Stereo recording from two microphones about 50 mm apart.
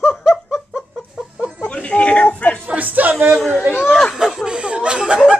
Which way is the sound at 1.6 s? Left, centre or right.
Left.